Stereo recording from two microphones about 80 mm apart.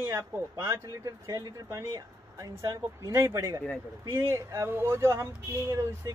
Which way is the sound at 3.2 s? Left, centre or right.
Right.